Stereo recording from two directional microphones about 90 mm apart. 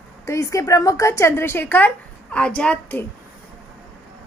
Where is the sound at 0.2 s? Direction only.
35° left (ahead or behind); by 3.0 s 15° left (ahead or behind).